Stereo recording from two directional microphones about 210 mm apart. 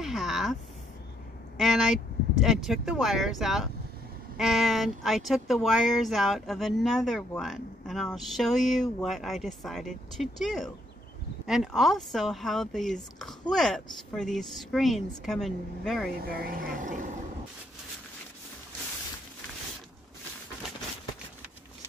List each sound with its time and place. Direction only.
0.0 s a sound: centre (ahead or behind)
1.6 s speech: centre (ahead or behind)
16.2 s speech: 45° right (ahead or behind)